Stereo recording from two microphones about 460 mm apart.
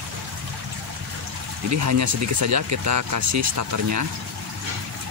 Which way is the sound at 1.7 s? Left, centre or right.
Right.